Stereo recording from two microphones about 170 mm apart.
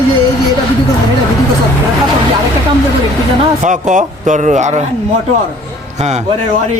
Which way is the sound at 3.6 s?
50° right (ahead or behind).